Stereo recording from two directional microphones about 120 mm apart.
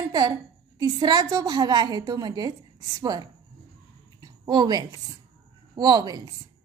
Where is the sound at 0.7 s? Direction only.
30° right (ahead or behind).